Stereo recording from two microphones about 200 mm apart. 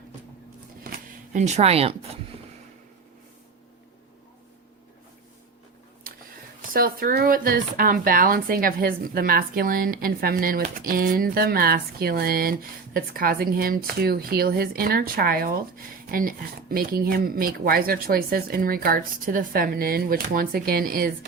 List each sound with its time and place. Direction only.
0.9 s shuffling cards: 40° right (ahead or behind)
6.6 s speech: 45° right (ahead or behind)